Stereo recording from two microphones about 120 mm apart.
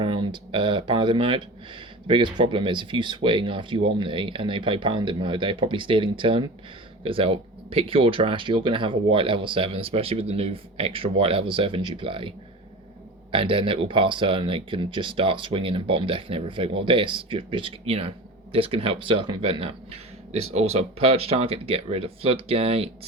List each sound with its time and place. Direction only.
0.0 s speech: 45° right (ahead or behind)
13.3 s speech: 45° right (ahead or behind)